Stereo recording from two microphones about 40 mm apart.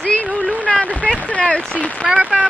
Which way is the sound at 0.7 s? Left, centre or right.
Centre.